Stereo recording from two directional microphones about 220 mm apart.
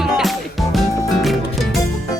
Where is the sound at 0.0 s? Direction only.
Centre (ahead or behind).